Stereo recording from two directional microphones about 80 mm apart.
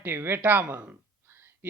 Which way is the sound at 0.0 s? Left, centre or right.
Right.